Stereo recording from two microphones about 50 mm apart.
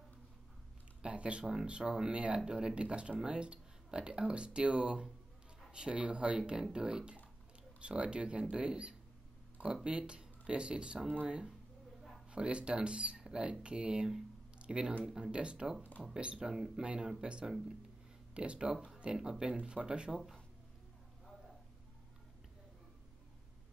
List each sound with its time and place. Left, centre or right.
1.0 s speech: right
20.1 s speech: centre